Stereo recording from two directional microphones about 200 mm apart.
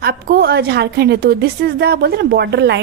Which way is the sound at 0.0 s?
50° right (ahead or behind).